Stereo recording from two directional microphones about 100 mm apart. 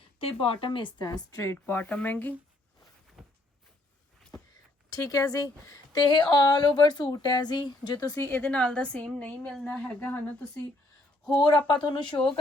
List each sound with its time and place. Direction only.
0.2 s speech: 65° left (ahead or behind); by 1.5 s 35° left (ahead or behind)
1.6 s speech: 20° left (ahead or behind)
3.2 s a sound: 5° right (ahead or behind)
4.9 s speech: 35° left (ahead or behind)
6.0 s a woman's voice: 45° left (ahead or behind)
8.1 s speech: 25° left (ahead or behind)
8.4 s a woman's voice: 10° left (ahead or behind)
10.0 s speech: 20° left (ahead or behind)
11.7 s a woman's voice: 50° left (ahead or behind)